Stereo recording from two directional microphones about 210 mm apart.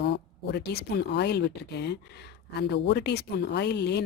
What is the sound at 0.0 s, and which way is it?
Speech, 55° left (ahead or behind).